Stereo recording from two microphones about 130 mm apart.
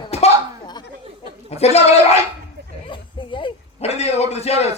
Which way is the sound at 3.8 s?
55° left (ahead or behind).